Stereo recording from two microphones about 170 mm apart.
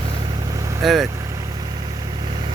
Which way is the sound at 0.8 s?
Centre (ahead or behind).